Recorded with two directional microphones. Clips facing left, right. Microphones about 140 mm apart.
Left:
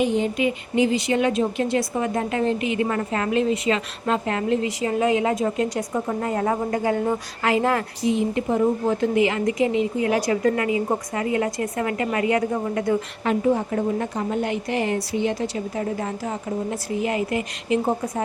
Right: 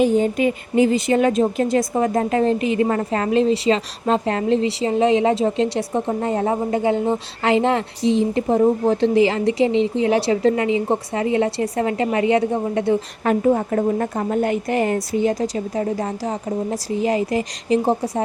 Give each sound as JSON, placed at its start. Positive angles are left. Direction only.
{"t": 0.0, "sound": "a woman's voice", "side_deg": -45}
{"t": 13.2, "sound": "a woman's voice", "side_deg": -50}